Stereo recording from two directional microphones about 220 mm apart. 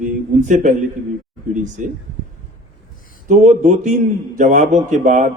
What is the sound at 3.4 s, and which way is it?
A man's voice, 35° right (ahead or behind).